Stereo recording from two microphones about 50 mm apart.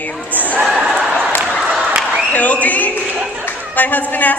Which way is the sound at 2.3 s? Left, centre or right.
Left.